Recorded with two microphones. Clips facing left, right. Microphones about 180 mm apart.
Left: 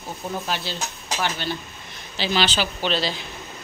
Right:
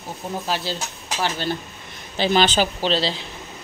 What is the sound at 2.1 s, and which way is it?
Speech, 50° right (ahead or behind).